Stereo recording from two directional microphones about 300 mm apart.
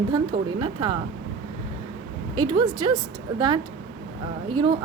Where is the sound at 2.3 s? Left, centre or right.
Centre.